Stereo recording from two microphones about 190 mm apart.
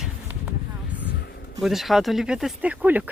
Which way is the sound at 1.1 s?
55° left (ahead or behind).